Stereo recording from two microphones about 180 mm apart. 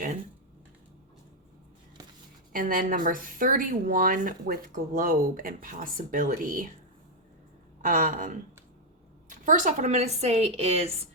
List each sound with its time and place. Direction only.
2.5 s speech: 50° right (ahead or behind)
7.8 s a woman's voice: 45° right (ahead or behind)